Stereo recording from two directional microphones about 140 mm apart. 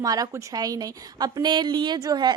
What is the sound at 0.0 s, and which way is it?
A woman's voice, 25° right (ahead or behind).